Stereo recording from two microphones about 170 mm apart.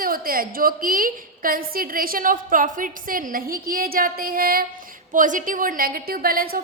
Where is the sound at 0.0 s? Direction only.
60° right (ahead or behind).